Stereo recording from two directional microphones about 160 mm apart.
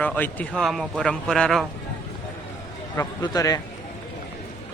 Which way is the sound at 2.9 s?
25° left (ahead or behind).